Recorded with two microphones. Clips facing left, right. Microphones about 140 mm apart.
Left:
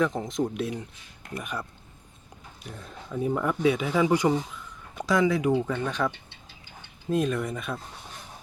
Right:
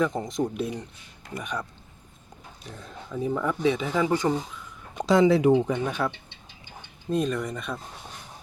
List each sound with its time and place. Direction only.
0.0 s speech: centre (ahead or behind)
3.2 s speech: 5° left (ahead or behind)
4.9 s speech: 25° right (ahead or behind)
7.1 s speech: centre (ahead or behind)